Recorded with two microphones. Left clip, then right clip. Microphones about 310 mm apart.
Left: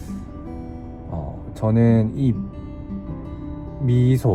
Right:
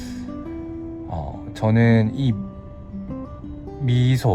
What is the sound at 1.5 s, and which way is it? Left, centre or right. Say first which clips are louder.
Speech: even; right.